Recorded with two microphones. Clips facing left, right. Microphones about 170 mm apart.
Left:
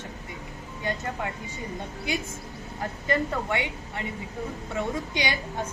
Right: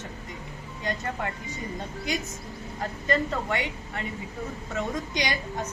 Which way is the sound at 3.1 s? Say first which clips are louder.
Even; 15° left (ahead or behind).